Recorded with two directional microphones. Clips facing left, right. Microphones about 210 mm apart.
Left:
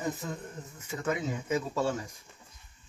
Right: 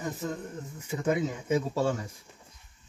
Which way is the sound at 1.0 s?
30° right (ahead or behind).